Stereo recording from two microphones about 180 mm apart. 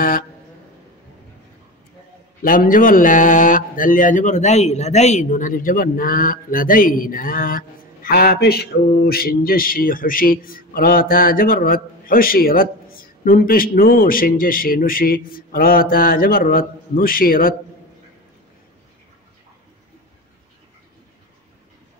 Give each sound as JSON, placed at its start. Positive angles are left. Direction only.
{"t": 2.4, "sound": "speech", "side_deg": 50}